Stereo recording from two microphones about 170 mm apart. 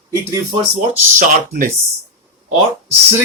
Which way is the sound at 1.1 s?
50° right (ahead or behind).